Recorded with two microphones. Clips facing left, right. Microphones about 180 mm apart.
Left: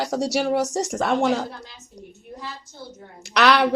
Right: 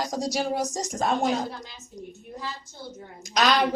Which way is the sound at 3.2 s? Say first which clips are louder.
Left 4 dB; 70° left (ahead or behind).